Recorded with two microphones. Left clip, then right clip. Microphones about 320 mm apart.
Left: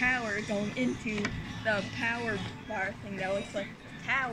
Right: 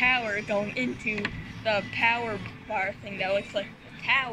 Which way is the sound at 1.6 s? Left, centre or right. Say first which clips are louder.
Right 6 dB; centre.